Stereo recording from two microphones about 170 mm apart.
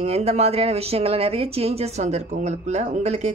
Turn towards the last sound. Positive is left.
turn(degrees=-40)  # may be behind; listen again after turning